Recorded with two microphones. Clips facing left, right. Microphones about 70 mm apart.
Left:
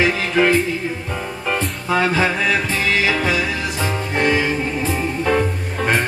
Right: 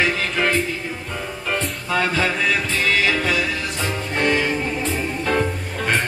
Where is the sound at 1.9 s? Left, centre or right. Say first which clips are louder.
Left 3 dB; centre.